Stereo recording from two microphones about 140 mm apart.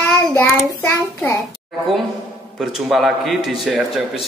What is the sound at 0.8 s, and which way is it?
Speech, 15° left (ahead or behind).